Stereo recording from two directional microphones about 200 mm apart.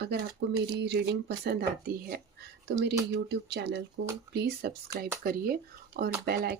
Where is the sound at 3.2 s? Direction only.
55° right (ahead or behind).